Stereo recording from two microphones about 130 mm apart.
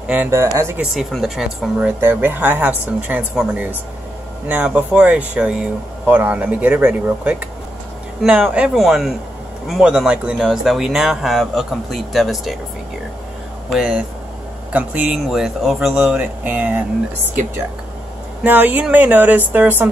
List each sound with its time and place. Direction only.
0.1 s speech: 20° right (ahead or behind)
0.7 s speech: centre (ahead or behind)
1.9 s speech: 15° right (ahead or behind); by 12.5 s centre (ahead or behind)
13.7 s speech: 5° right (ahead or behind)
18.4 s speech: 15° right (ahead or behind)